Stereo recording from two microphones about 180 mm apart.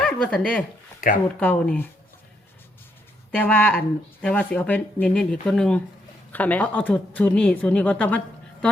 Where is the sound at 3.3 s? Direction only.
5° left (ahead or behind).